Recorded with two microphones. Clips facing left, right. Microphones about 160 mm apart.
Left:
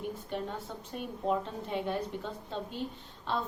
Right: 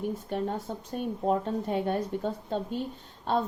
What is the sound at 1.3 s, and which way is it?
A woman's voice, 45° right (ahead or behind).